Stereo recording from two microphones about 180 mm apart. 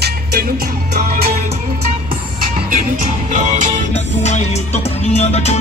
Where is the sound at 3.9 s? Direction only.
40° left (ahead or behind).